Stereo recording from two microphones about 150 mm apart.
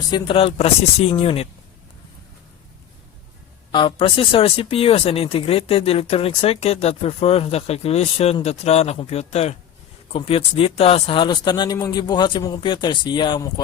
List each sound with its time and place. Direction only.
0.1 s speech: 35° left (ahead or behind)
3.7 s speech: 30° left (ahead or behind)